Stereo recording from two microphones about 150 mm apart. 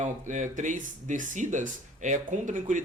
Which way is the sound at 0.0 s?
55° right (ahead or behind).